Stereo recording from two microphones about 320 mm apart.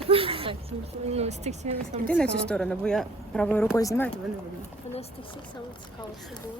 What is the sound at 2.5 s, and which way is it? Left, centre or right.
Speech, centre.